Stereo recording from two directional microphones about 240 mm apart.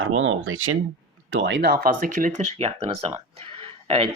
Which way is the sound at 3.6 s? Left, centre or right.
Right.